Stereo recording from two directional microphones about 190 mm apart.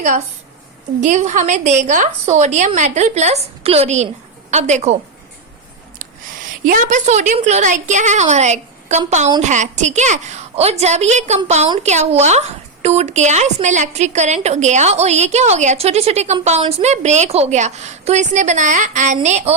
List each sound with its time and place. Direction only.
1.0 s speech: 40° right (ahead or behind)
6.0 s a woman's voice: 45° right (ahead or behind)